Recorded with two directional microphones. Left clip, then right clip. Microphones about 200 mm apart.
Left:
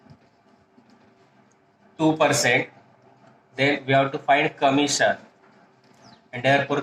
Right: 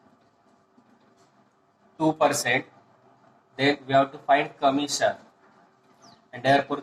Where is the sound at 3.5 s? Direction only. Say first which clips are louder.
Left 1 dB; 40° left (ahead or behind).